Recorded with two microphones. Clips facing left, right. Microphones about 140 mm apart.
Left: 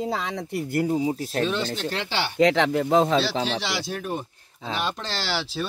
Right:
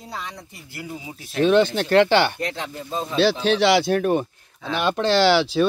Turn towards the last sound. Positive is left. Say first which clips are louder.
# right 12 dB
turn(degrees=-65)  # may be behind; listen again after turning